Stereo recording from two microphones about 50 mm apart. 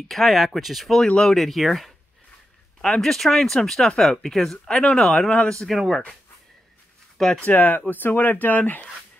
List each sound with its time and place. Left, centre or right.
0.1 s speech: centre
1.0 s speech: centre
1.4 s speech: centre
4.6 s speech: left
5.0 s speech: centre
5.3 s speech: centre
5.7 s speech: centre
7.3 s speech: left